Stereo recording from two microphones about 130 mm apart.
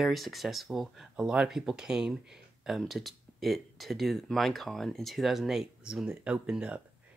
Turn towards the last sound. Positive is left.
turn(degrees=-5)  # may be behind; listen again after turning